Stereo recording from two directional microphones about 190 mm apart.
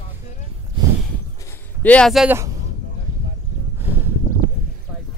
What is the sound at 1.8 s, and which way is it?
Speech, 5° left (ahead or behind).